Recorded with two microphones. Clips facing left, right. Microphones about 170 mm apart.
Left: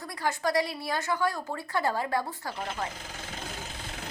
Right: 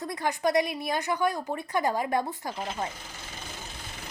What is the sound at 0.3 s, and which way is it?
A woman's voice, 20° right (ahead or behind).